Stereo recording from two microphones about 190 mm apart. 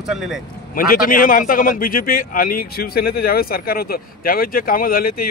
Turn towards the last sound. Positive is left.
turn(degrees=50)  # may be behind; listen again after turning